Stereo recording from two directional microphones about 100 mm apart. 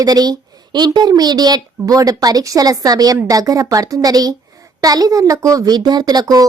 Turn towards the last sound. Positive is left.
turn(degrees=-40)  # may be behind; listen again after turning